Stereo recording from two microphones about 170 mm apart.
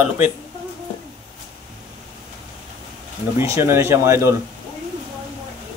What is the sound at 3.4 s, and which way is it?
Speech, 15° right (ahead or behind).